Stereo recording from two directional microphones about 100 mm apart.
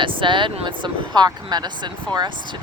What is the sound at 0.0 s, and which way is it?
Speech, 55° right (ahead or behind).